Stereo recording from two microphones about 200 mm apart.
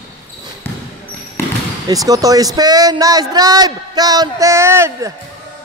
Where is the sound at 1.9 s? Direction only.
15° right (ahead or behind).